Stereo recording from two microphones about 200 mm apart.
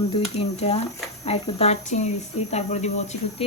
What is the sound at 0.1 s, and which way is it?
Speech, 30° left (ahead or behind).